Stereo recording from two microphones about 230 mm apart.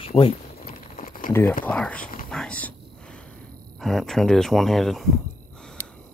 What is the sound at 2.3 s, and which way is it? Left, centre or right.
Mechanisms, centre.